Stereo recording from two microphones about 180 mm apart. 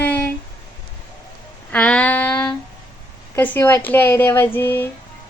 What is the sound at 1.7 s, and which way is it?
Child singing, 10° left (ahead or behind).